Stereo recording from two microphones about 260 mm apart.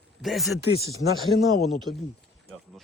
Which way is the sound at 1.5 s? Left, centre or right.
Centre.